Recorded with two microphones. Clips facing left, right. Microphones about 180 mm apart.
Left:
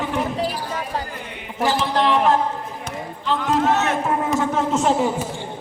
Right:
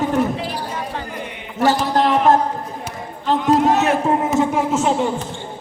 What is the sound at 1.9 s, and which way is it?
Speech, 45° right (ahead or behind).